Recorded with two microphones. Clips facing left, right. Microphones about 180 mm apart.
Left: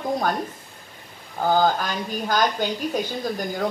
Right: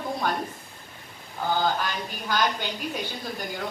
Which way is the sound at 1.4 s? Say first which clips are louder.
Left 5 dB; 45° left (ahead or behind).